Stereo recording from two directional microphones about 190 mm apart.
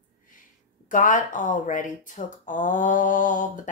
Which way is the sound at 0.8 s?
45° left (ahead or behind).